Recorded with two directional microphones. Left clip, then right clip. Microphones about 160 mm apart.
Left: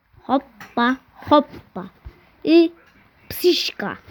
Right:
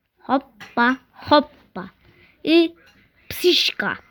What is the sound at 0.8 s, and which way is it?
Speech, 5° right (ahead or behind).